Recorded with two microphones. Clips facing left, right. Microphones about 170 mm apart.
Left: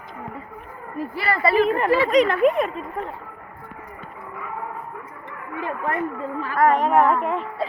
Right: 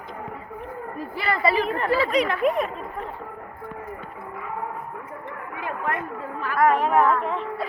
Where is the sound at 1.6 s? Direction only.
Centre (ahead or behind).